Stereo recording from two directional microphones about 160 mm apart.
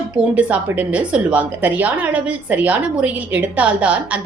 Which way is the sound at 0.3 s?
10° right (ahead or behind).